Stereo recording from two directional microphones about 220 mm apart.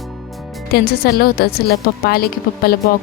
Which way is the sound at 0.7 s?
45° left (ahead or behind).